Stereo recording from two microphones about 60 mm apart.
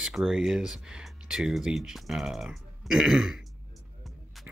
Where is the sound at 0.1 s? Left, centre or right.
Centre.